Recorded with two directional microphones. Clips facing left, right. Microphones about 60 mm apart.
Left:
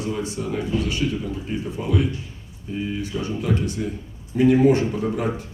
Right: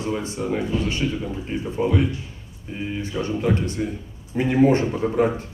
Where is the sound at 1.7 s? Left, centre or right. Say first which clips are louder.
Right 4 dB; right.